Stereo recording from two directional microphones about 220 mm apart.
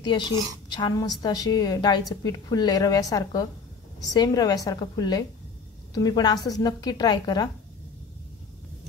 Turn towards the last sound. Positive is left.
turn(degrees=20)  # may be behind; listen again after turning